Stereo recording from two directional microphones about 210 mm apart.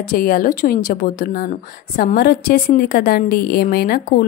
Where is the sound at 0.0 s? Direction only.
45° left (ahead or behind).